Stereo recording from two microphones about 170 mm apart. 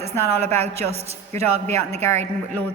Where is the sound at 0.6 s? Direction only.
40° right (ahead or behind).